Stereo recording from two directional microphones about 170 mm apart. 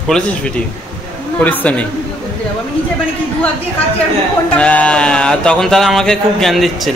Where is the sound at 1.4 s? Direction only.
10° left (ahead or behind).